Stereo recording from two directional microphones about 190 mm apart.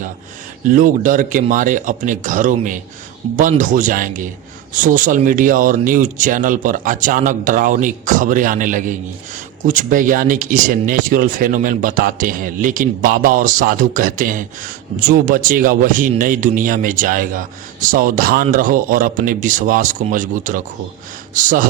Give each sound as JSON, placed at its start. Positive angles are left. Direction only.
{"t": 0.7, "sound": "speech", "side_deg": -45}
{"t": 3.2, "sound": "speech", "side_deg": -30}
{"t": 3.6, "sound": "speech", "side_deg": -40}